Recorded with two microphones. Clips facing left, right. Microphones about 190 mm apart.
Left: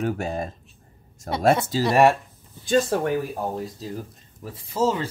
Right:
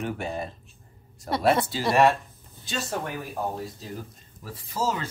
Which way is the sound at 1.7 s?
40° left (ahead or behind).